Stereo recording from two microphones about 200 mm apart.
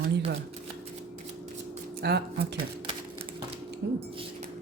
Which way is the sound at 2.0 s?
55° right (ahead or behind).